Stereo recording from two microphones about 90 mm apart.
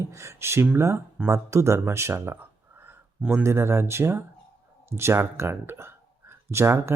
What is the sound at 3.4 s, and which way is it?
Speech, 30° right (ahead or behind).